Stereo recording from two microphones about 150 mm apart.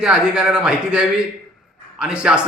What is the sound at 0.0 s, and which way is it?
A man's voice, 5° right (ahead or behind).